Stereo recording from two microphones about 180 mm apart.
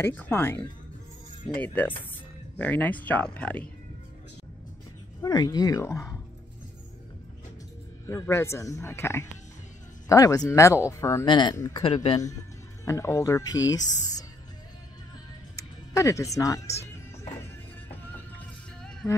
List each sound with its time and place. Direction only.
0.0 s speech: 10° left (ahead or behind)
5.2 s speech: 20° left (ahead or behind)
8.1 s speech: 15° left (ahead or behind)
11.8 s speech: 35° left (ahead or behind)
12.8 s speech: 15° left (ahead or behind)
15.9 s speech: 15° left (ahead or behind)